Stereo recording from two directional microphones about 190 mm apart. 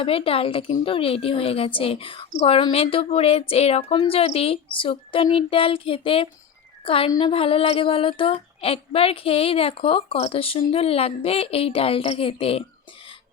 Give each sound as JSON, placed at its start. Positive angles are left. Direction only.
{"t": 0.0, "sound": "a woman's voice", "side_deg": 30}